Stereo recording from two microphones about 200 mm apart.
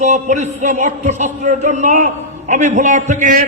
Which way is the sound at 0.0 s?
35° right (ahead or behind).